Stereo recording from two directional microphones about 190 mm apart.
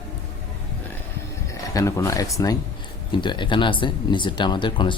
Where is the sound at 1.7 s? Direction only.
15° left (ahead or behind).